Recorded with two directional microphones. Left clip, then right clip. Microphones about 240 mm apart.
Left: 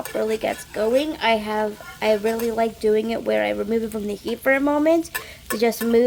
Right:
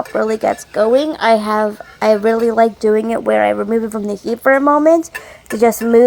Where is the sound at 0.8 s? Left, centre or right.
Centre.